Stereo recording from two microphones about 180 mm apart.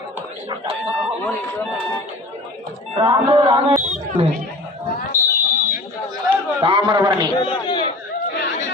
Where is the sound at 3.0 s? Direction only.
30° right (ahead or behind).